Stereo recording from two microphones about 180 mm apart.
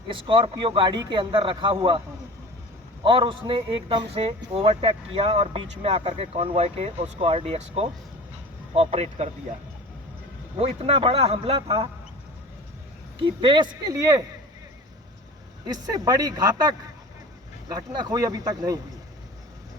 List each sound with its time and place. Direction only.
0.1 s a man's voice: 30° right (ahead or behind)
3.0 s a man's voice: 30° right (ahead or behind)
10.6 s speech: 30° right (ahead or behind)
13.1 s a man's voice: 25° right (ahead or behind)
15.6 s a man's voice: 20° right (ahead or behind)